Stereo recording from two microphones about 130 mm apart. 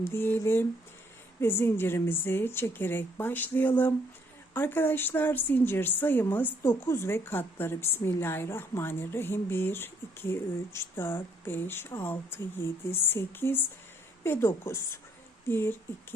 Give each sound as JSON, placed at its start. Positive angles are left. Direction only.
{"t": 0.0, "sound": "a woman's voice", "side_deg": 15}